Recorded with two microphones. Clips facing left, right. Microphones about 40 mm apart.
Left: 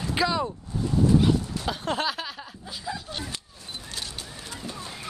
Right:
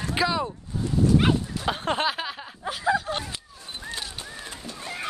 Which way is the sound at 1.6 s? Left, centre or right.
Right.